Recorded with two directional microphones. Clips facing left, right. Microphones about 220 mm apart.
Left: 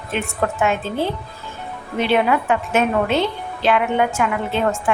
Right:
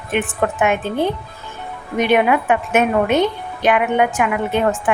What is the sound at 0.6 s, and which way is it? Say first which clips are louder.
A woman's voice: right 3 dB; 15° right (ahead or behind).